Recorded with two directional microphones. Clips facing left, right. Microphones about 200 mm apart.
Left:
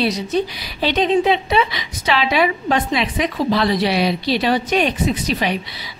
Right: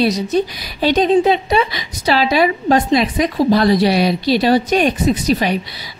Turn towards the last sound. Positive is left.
turn(degrees=-40)  # may be behind; listen again after turning